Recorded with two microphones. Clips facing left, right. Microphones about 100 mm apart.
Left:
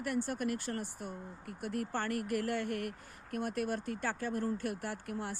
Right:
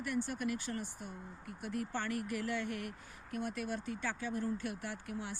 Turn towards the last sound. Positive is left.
turn(degrees=50)  # may be behind; listen again after turning